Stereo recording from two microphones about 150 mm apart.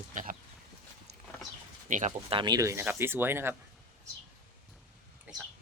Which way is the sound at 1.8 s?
60° right (ahead or behind).